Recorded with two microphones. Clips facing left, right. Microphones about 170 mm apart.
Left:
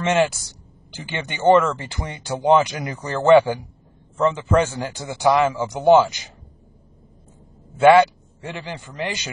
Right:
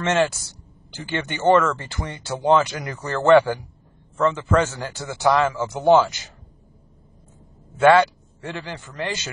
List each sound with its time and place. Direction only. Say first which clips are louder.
0.0 s speech: left 1 dB; 15° left (ahead or behind)
7.8 s speech: left 2 dB; 15° left (ahead or behind)